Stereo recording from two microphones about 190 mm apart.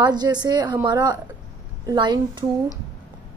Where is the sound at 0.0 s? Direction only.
20° right (ahead or behind).